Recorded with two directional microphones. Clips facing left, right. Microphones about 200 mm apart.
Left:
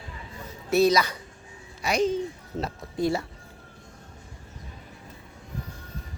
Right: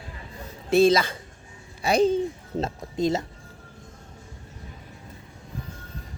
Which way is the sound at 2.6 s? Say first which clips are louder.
Right 1 dB; 20° right (ahead or behind).